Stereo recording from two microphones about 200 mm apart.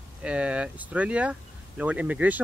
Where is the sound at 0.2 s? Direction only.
5° right (ahead or behind).